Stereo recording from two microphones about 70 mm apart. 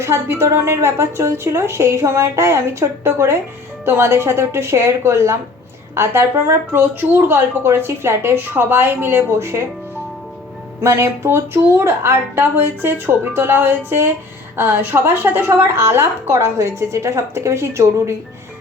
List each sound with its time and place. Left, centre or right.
0.0 s a woman's voice: right
10.8 s a woman's voice: right